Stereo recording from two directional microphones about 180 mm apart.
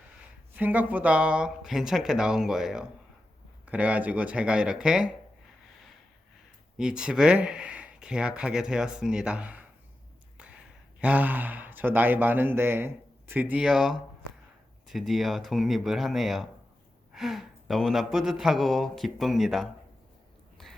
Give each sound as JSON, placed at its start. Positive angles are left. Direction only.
{"t": 0.5, "sound": "speech", "side_deg": -10}
{"t": 6.7, "sound": "speech", "side_deg": -5}
{"t": 11.0, "sound": "speech", "side_deg": -10}